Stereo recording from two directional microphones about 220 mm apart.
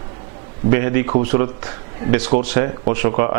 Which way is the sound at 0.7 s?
15° right (ahead or behind).